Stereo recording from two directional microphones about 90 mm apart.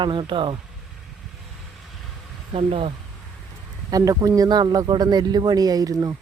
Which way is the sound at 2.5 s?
90° right.